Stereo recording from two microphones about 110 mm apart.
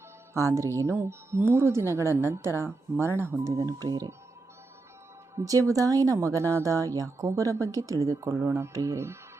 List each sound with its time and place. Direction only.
0.3 s speech: 25° right (ahead or behind)
5.3 s speech: 30° right (ahead or behind)